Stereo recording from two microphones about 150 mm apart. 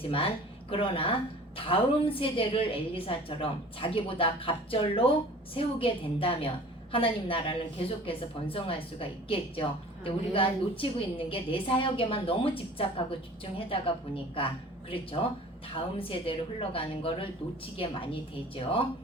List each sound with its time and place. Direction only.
0.0 s a woman's voice: 40° left (ahead or behind)